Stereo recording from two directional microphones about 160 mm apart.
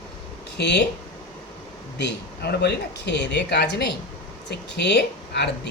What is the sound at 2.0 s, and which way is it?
Speech, 90° left.